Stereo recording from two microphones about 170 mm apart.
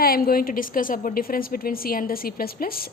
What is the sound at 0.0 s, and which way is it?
A woman's voice, 60° left (ahead or behind).